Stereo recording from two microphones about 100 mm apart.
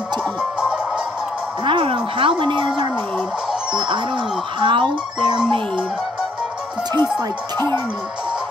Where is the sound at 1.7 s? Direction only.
55° right (ahead or behind).